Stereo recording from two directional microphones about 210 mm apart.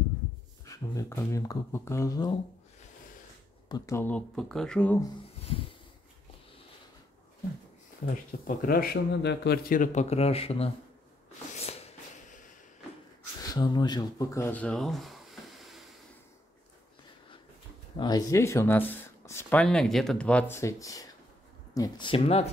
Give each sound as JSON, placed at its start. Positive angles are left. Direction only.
{"t": 0.7, "sound": "speech", "side_deg": 15}
{"t": 3.6, "sound": "speech", "side_deg": 15}
{"t": 8.1, "sound": "speech", "side_deg": 40}
{"t": 11.5, "sound": "a sound", "side_deg": 30}
{"t": 13.5, "sound": "speech", "side_deg": 20}
{"t": 17.9, "sound": "speech", "side_deg": 20}